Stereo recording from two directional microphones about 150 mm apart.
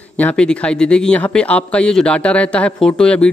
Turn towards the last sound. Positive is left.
turn(degrees=5)  # may be behind; listen again after turning